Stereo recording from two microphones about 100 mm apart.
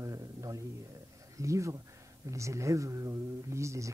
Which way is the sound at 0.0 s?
35° right (ahead or behind).